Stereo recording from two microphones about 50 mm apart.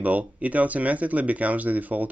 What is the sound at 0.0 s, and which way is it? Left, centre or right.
Speech, right.